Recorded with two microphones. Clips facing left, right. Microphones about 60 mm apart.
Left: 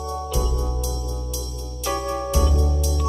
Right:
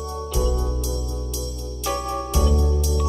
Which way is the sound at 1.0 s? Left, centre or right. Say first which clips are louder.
Right 1 dB; left.